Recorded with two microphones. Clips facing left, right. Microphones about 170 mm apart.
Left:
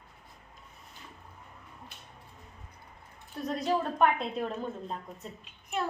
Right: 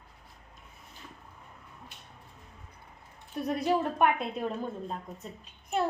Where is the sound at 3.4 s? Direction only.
10° right (ahead or behind).